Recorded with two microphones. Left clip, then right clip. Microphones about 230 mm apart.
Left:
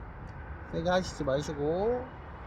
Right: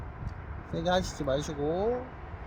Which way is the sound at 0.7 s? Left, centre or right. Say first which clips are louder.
Even; centre.